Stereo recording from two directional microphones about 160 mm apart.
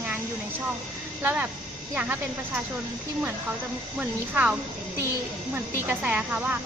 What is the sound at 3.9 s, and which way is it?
Speech, 10° right (ahead or behind).